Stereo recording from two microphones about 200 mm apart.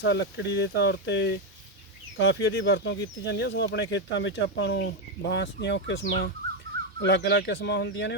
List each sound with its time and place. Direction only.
0.0 s speech: 65° left (ahead or behind)